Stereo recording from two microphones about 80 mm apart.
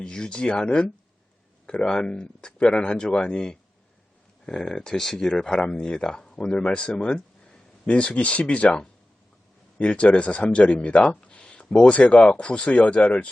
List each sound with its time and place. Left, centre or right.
0.0 s speech: centre